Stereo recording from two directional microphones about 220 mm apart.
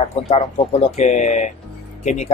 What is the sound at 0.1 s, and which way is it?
Speech, 30° left (ahead or behind).